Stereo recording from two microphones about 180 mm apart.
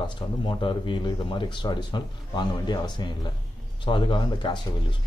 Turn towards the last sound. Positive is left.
turn(degrees=25)  # may be behind; listen again after turning